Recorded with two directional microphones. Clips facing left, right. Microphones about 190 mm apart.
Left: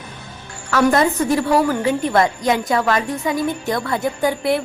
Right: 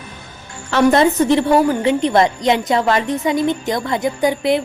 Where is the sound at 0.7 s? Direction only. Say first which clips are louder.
Right 3 dB; 25° right (ahead or behind).